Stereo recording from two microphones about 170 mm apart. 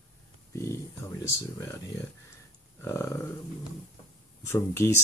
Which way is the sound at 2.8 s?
15° left (ahead or behind).